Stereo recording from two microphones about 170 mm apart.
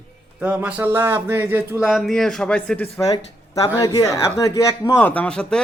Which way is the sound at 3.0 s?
20° left (ahead or behind).